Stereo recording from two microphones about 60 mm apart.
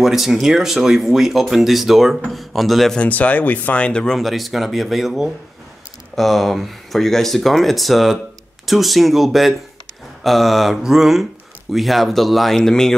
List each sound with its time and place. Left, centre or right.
0.0 s speech: centre
3.0 s speech: left
4.2 s speech: centre